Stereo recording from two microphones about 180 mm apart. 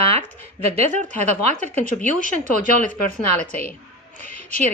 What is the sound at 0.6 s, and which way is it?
A woman's voice, 35° right (ahead or behind).